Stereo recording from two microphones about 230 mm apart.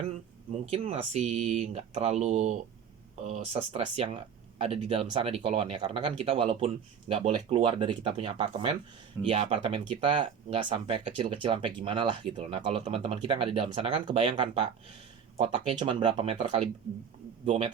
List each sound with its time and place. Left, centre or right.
0.6 s speech: right